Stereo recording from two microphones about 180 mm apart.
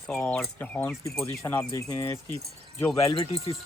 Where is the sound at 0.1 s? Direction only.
5° left (ahead or behind).